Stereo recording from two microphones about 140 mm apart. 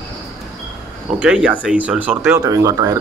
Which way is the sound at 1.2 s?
10° right (ahead or behind).